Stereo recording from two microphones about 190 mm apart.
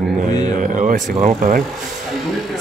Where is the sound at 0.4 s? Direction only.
40° right (ahead or behind).